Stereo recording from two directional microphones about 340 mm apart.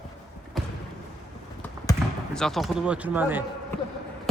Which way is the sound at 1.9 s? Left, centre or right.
Centre.